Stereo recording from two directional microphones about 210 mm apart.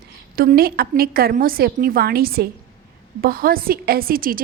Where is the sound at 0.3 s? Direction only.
45° right (ahead or behind).